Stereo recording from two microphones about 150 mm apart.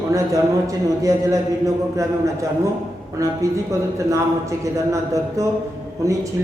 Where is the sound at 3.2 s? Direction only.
20° right (ahead or behind).